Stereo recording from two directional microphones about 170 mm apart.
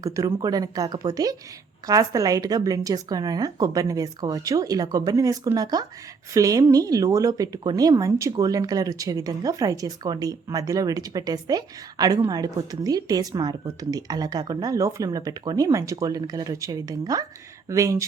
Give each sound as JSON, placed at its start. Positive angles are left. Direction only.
{"t": 0.0, "sound": "a woman's voice", "side_deg": -20}